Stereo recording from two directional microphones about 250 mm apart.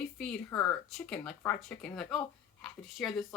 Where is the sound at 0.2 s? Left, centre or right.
Centre.